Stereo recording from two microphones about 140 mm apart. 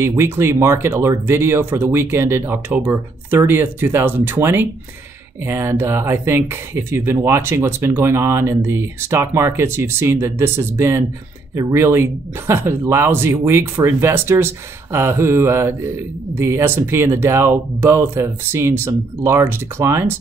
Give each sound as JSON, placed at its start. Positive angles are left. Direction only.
{"t": 0.0, "sound": "speech", "side_deg": -20}